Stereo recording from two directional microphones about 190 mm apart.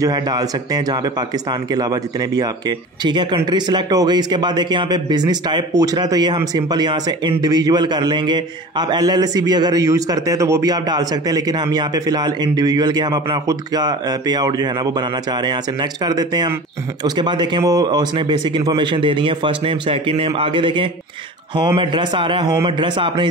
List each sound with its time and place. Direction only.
0.0 s speech: 20° right (ahead or behind)